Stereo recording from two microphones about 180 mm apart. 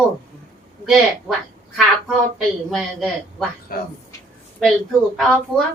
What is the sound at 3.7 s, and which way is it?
Speech, 55° left (ahead or behind).